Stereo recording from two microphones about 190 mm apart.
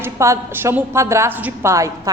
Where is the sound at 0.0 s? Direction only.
15° right (ahead or behind).